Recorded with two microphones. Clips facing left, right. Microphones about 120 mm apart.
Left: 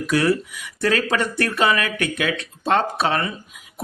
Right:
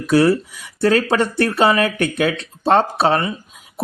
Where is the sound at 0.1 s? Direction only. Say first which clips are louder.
Right 6 dB; 35° right (ahead or behind).